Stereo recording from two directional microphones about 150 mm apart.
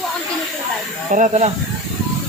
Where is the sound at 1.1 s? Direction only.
55° right (ahead or behind).